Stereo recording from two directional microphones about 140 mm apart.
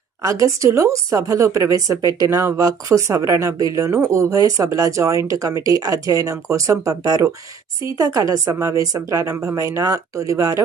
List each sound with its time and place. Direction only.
0.2 s speech: 25° right (ahead or behind)